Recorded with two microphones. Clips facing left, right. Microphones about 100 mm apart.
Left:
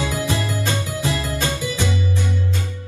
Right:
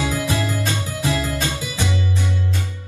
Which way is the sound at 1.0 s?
20° right (ahead or behind).